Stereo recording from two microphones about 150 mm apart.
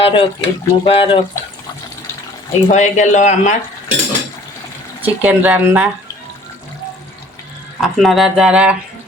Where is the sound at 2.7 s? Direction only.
50° left (ahead or behind).